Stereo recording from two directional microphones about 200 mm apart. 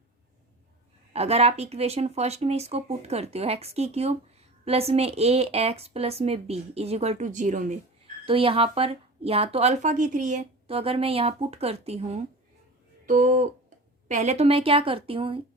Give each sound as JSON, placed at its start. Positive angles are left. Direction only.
{"t": 1.1, "sound": "a woman's voice", "side_deg": -30}
{"t": 8.2, "sound": "a woman's voice", "side_deg": -25}